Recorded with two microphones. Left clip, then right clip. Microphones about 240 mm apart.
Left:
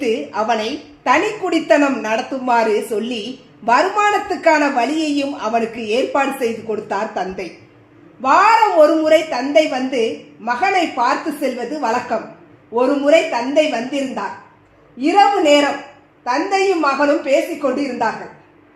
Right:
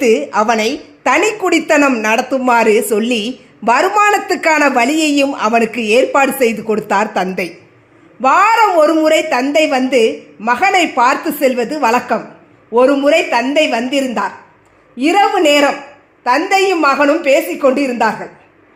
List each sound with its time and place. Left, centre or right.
0.0 s speech: right